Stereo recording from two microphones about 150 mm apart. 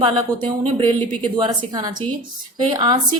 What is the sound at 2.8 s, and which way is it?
Speech, 30° right (ahead or behind).